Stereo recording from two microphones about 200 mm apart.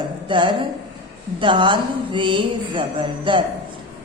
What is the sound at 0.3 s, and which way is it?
A woman's voice, 25° right (ahead or behind).